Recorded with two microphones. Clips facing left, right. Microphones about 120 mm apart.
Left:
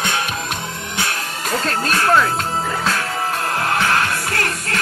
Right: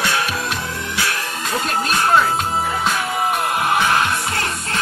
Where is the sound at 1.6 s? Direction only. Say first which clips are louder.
Right 1 dB; 15° right (ahead or behind).